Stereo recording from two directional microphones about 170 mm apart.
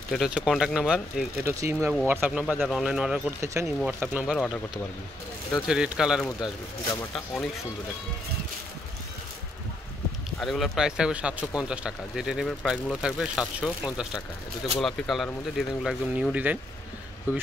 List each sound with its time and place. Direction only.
0.1 s speech: centre (ahead or behind)
1.5 s speech: 15° right (ahead or behind)
3.3 s speech: 15° right (ahead or behind)
5.5 s speech: 5° right (ahead or behind)
10.4 s speech: centre (ahead or behind)